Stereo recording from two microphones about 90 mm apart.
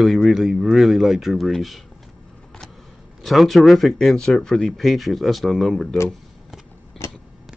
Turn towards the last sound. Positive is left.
turn(degrees=0)  # may be behind; listen again after turning